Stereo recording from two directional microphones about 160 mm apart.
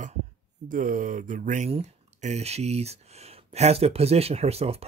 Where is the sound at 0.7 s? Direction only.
55° right (ahead or behind).